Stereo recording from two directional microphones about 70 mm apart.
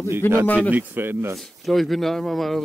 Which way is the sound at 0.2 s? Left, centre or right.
Left.